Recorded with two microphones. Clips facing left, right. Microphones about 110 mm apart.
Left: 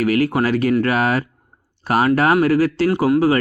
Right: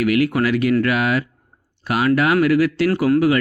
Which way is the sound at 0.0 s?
35° left (ahead or behind).